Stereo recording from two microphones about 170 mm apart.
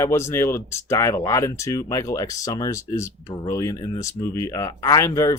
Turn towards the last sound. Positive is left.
turn(degrees=20)  # may be behind; listen again after turning